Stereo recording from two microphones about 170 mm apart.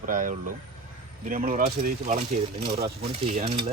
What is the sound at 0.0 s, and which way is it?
Speech, 50° right (ahead or behind).